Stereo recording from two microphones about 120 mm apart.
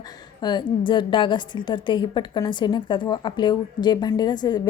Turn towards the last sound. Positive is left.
turn(degrees=35)  # may be behind; listen again after turning